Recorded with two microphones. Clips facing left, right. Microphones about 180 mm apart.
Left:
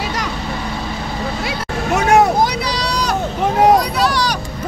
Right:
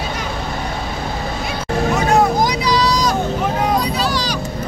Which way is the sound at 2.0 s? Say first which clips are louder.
Left 4 dB; 70° left (ahead or behind).